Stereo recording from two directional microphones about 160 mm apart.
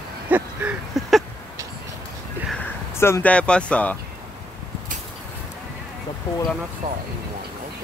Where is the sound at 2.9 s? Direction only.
15° left (ahead or behind).